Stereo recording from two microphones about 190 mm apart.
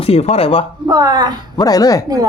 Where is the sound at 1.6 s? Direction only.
20° left (ahead or behind).